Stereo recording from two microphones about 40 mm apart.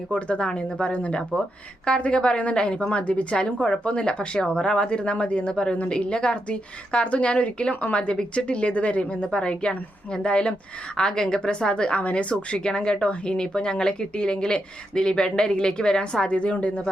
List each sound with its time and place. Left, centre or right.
0.1 s a woman's voice: left
7.9 s a woman's voice: left
8.5 s a woman's voice: left